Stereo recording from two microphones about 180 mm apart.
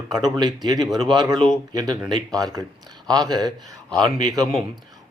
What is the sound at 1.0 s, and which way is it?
Speech, 25° right (ahead or behind).